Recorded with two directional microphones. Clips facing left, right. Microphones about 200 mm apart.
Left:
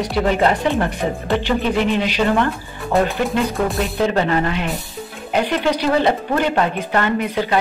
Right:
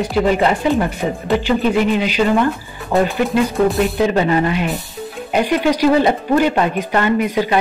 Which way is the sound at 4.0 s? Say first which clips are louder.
Right 1 dB; 10° right (ahead or behind).